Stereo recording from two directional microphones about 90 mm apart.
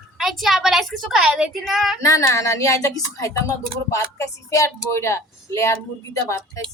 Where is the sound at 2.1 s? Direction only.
35° left (ahead or behind).